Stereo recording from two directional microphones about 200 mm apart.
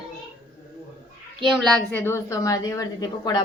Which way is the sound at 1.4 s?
Centre (ahead or behind).